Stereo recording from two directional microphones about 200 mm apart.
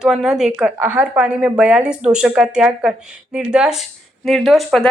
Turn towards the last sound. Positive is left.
turn(degrees=0)  # may be behind; listen again after turning